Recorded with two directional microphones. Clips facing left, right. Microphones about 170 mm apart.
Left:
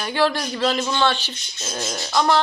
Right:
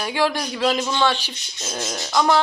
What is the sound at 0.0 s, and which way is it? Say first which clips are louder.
A woman's voice: left 1 dB; 10° right (ahead or behind).